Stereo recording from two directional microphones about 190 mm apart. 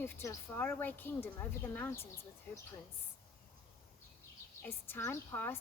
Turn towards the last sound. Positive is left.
turn(degrees=10)  # may be behind; listen again after turning